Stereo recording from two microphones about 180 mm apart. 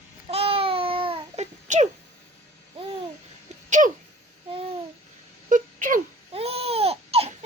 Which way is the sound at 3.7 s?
45° right (ahead or behind).